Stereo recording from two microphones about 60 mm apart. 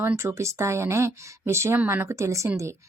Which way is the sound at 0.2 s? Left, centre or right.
Right.